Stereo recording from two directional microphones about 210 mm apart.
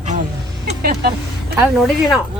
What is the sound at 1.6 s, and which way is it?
Speech, centre (ahead or behind).